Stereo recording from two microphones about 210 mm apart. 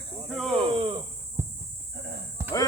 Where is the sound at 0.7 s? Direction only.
25° right (ahead or behind).